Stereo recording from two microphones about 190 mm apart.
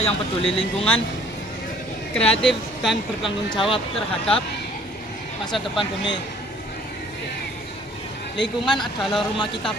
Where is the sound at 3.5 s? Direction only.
25° left (ahead or behind).